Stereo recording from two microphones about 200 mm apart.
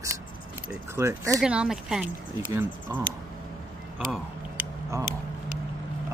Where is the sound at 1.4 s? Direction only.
5° right (ahead or behind).